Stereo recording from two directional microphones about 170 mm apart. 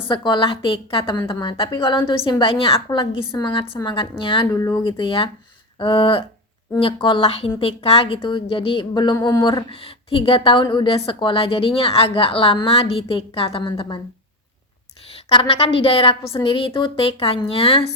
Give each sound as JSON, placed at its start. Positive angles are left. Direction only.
{"t": 0.1, "sound": "a woman's voice", "side_deg": 30}
{"t": 4.5, "sound": "a woman's voice", "side_deg": 20}
{"t": 15.3, "sound": "a woman's voice", "side_deg": 30}